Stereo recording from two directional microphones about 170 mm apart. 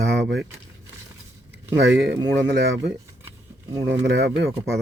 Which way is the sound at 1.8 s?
90° right.